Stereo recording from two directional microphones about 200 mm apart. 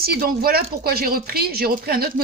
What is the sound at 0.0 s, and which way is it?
Speech, 50° right (ahead or behind).